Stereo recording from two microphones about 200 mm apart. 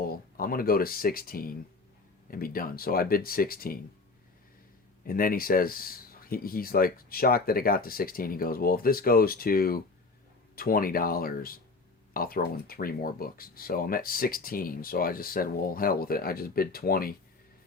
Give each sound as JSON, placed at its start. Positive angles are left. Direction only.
{"t": 0.0, "sound": "speech", "side_deg": 45}
{"t": 5.0, "sound": "speech", "side_deg": 45}